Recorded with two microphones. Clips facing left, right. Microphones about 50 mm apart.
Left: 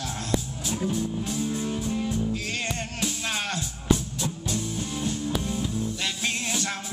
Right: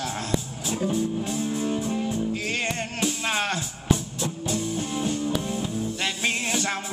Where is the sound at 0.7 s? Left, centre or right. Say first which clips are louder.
Right 3 dB; centre.